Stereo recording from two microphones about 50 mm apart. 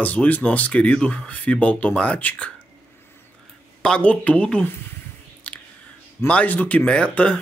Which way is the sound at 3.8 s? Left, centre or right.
Left.